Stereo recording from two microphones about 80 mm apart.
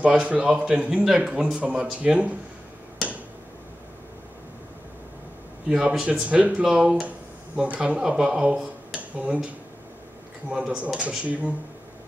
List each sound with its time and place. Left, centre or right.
0.0 s speech: centre
5.7 s speech: centre
10.5 s speech: centre